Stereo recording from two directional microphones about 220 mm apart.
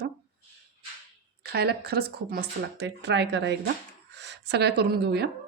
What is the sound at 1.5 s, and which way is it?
Speech, 45° right (ahead or behind).